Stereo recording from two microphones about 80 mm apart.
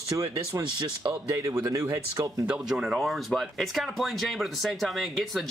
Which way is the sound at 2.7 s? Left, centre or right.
Centre.